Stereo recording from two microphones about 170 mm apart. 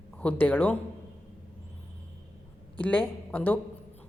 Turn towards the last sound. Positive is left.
turn(degrees=10)  # may be behind; listen again after turning